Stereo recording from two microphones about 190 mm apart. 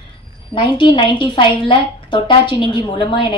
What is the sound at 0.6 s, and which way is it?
A woman's voice, 25° left (ahead or behind).